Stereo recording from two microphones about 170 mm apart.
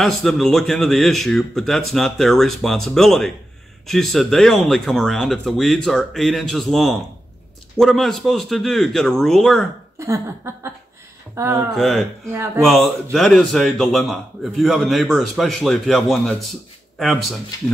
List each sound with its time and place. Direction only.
0.0 s a man's voice: centre (ahead or behind)
9.9 s speech: 15° right (ahead or behind)
11.7 s a man's voice: centre (ahead or behind)